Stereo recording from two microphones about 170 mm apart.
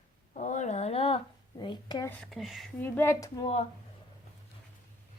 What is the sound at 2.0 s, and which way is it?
Speech, 10° left (ahead or behind).